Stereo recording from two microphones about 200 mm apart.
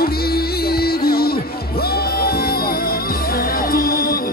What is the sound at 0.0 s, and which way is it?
Music, 50° left (ahead or behind).